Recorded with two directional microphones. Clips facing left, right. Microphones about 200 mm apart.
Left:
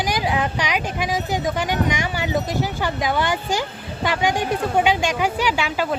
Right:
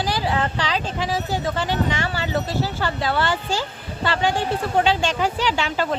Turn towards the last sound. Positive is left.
turn(degrees=10)  # may be behind; listen again after turning